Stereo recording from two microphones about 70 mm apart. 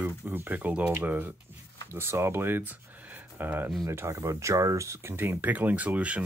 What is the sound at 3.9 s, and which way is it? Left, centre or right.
Speech, right.